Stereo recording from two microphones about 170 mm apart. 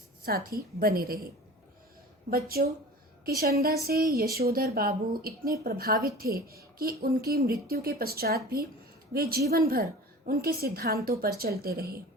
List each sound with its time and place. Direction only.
0.2 s a woman's voice: 60° right (ahead or behind)
2.3 s speech: 65° right (ahead or behind)